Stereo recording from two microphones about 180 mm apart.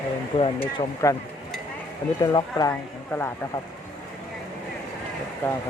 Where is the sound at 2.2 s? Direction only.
20° left (ahead or behind).